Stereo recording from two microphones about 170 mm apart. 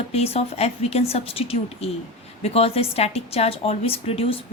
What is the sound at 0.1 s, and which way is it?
A woman's voice, 35° left (ahead or behind).